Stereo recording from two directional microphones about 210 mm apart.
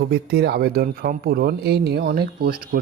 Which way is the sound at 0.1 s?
50° right (ahead or behind).